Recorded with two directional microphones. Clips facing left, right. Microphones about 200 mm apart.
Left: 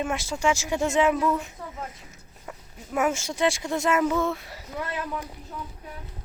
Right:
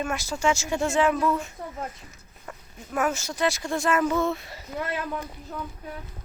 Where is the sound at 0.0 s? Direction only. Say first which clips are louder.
Even; 20° left (ahead or behind).